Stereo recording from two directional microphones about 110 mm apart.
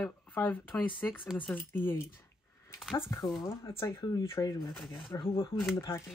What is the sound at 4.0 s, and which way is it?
Speech, 40° left (ahead or behind).